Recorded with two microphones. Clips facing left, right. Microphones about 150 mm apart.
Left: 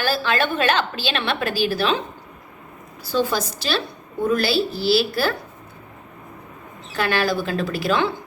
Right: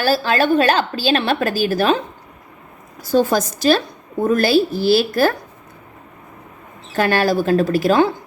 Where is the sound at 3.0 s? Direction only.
45° right (ahead or behind).